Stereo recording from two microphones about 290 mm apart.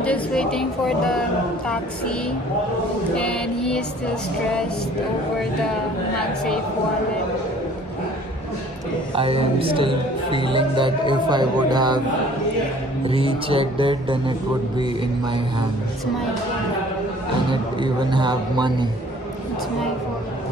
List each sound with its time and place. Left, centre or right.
0.0 s a woman's voice: centre
3.2 s a woman's voice: centre
9.1 s a man's voice: centre
13.1 s speech: centre
17.5 s speech: centre